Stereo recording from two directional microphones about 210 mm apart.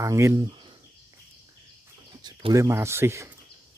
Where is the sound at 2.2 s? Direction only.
15° right (ahead or behind).